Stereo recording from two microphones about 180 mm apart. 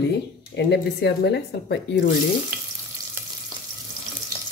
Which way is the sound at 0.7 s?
70° left (ahead or behind).